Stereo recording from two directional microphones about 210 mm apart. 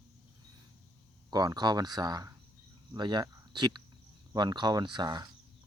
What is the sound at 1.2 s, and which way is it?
Speech, 20° right (ahead or behind).